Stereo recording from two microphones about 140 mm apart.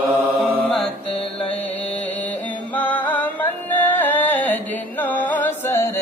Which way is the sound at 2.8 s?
10° left (ahead or behind).